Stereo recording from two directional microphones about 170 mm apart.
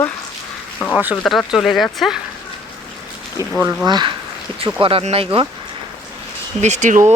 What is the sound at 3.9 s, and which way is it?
Speech, 25° right (ahead or behind).